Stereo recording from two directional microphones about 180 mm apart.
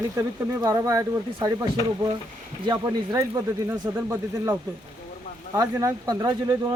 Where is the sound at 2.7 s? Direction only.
20° right (ahead or behind).